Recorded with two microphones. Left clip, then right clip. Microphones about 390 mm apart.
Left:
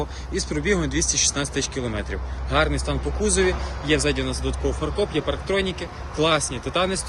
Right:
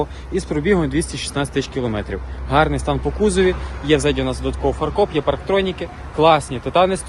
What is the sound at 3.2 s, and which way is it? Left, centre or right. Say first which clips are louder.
A man's voice: right 5 dB; centre.